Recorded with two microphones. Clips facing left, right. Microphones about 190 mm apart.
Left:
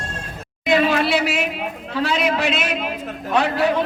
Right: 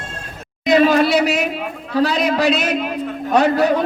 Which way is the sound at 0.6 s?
40° right (ahead or behind).